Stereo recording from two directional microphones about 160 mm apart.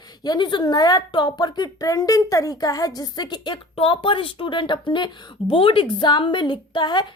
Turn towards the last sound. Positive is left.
turn(degrees=30)  # may be behind; listen again after turning